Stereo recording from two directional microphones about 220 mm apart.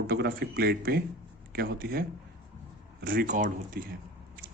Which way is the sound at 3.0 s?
40° right (ahead or behind).